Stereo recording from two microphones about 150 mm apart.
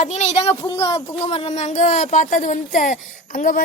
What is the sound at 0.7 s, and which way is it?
Speech, 35° left (ahead or behind).